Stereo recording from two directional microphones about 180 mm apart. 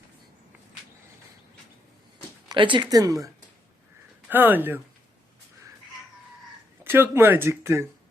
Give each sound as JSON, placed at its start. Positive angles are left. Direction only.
{"t": 2.5, "sound": "speech", "side_deg": -25}
{"t": 6.8, "sound": "speech", "side_deg": -10}